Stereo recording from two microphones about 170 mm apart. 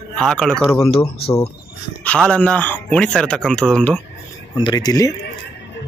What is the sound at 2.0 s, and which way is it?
Speech, 5° left (ahead or behind).